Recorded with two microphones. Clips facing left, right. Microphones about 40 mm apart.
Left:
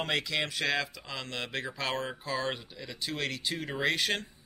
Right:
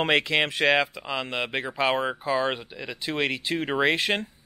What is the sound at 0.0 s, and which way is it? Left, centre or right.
Speech, right.